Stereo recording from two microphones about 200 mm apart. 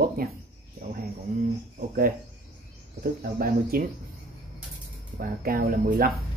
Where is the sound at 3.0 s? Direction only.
45° right (ahead or behind).